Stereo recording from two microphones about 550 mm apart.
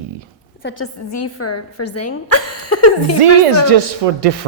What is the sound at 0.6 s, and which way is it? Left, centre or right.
A woman's voice, left.